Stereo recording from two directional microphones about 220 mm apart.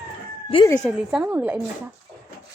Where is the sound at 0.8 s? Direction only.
Centre (ahead or behind).